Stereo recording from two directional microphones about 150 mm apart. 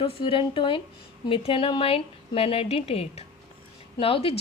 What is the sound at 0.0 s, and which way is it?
A woman's voice, 35° left (ahead or behind).